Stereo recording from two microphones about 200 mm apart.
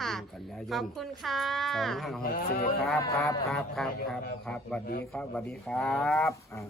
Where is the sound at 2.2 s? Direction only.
50° left (ahead or behind).